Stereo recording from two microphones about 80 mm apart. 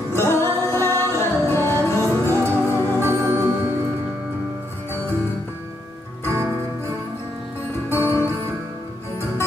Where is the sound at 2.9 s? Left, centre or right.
Right.